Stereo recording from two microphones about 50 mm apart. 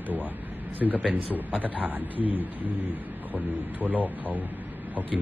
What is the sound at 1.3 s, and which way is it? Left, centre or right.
A man's voice, right.